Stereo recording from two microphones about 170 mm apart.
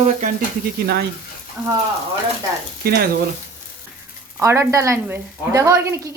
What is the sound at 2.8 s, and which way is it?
Speech, 65° right (ahead or behind).